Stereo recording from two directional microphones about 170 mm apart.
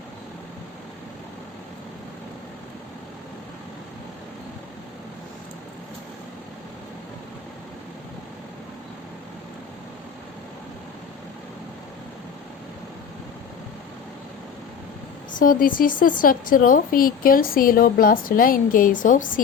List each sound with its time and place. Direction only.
15.4 s a woman's voice: 55° left (ahead or behind)